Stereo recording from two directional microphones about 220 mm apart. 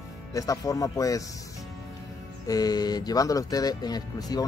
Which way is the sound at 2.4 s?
15° left (ahead or behind).